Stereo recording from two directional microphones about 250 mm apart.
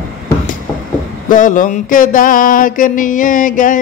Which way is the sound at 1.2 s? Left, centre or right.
Left.